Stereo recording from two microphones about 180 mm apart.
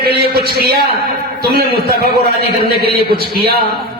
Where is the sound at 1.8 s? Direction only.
55° right (ahead or behind).